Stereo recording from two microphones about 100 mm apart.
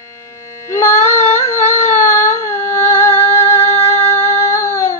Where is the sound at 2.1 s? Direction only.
25° left (ahead or behind).